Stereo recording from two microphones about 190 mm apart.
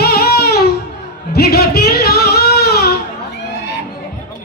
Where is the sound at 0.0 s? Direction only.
55° left (ahead or behind).